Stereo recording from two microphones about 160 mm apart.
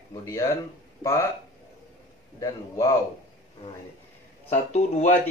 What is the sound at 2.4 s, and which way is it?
Speech, 20° left (ahead or behind).